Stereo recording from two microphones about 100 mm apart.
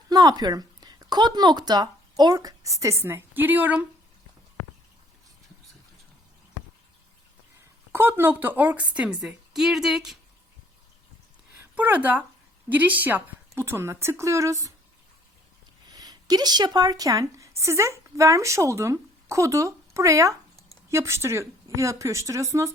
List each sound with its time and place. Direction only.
0.1 s speech: 40° right (ahead or behind); by 3.8 s 15° right (ahead or behind)
7.9 s a woman's voice: 25° right (ahead or behind); by 10.2 s 5° right (ahead or behind)
11.7 s a woman's voice: 15° right (ahead or behind); by 14.7 s 35° right (ahead or behind)
15.9 s a woman's voice: 40° right (ahead or behind)